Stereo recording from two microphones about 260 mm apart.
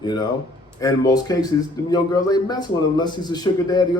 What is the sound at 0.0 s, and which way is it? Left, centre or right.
A man's voice, centre.